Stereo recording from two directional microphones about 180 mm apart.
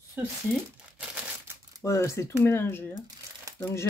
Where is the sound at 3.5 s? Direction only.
20° right (ahead or behind).